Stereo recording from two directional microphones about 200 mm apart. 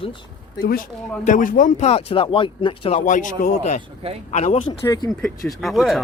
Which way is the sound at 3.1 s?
40° left (ahead or behind).